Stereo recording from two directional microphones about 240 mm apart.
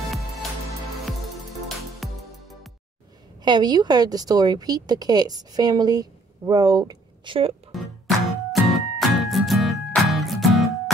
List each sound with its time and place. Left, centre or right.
2.0 s music: centre
3.4 s a woman's voice: centre
7.7 s music: centre